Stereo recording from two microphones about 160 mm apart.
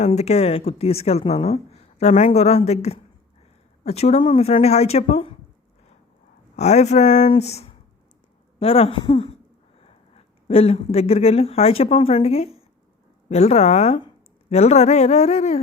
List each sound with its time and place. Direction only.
0.0 s speech: 40° left (ahead or behind)
6.6 s a man's voice: 45° left (ahead or behind)